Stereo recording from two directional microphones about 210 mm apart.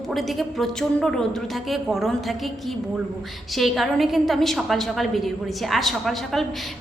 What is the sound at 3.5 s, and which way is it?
A woman's voice, centre (ahead or behind).